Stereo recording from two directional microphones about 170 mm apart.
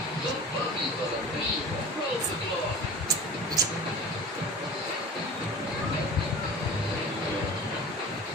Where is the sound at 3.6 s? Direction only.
20° right (ahead or behind).